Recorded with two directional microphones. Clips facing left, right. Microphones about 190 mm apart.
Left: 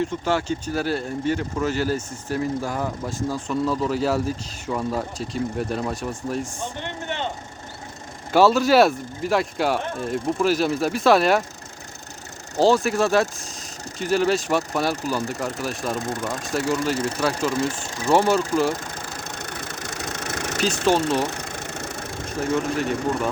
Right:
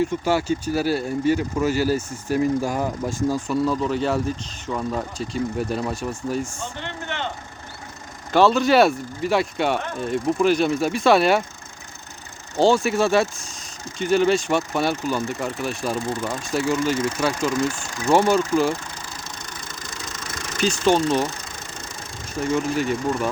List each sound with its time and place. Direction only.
0.0 s speech: 10° right (ahead or behind)
6.6 s a sound: 15° left (ahead or behind)
8.3 s speech: 5° left (ahead or behind)
12.5 s speech: centre (ahead or behind)
16.0 s speech: 50° left (ahead or behind)
16.5 s speech: centre (ahead or behind)
16.8 s speech: 35° left (ahead or behind)
18.1 s speech: centre (ahead or behind)
19.0 s engine: 60° left (ahead or behind)
22.4 s speech: centre (ahead or behind)